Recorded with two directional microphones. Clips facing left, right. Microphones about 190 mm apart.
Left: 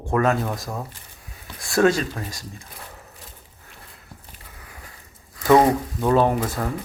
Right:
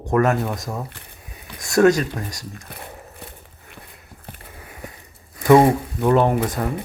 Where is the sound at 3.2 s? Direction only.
65° right (ahead or behind).